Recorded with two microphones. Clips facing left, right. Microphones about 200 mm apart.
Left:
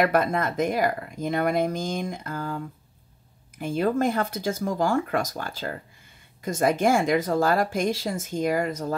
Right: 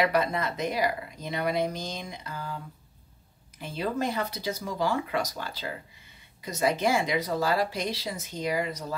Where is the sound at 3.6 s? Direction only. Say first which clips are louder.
Left 7 dB; 50° left (ahead or behind).